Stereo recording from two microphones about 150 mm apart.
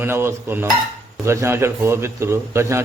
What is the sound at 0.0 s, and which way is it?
A man's voice, 15° right (ahead or behind).